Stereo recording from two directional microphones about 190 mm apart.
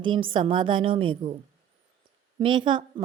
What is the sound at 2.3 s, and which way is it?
Speech, 25° right (ahead or behind).